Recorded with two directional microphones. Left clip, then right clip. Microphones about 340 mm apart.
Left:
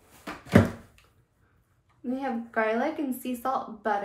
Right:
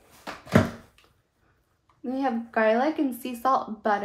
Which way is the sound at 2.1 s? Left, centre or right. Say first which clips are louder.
Right 3 dB; right.